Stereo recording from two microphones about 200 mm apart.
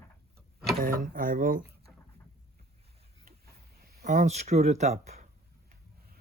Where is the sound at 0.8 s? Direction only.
45° right (ahead or behind).